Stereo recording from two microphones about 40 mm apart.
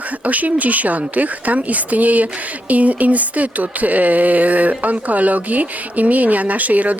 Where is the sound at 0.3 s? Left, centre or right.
Right.